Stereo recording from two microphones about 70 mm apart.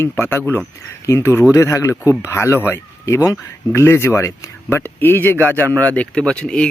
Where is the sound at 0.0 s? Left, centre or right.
Left.